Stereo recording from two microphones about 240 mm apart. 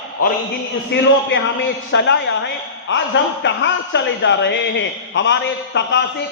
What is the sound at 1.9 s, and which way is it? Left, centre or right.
A man's voice, left.